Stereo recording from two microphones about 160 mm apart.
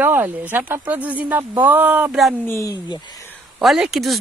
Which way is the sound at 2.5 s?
20° left (ahead or behind).